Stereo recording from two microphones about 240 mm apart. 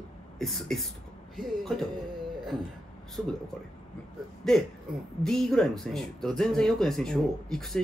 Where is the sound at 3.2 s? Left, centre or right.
Centre.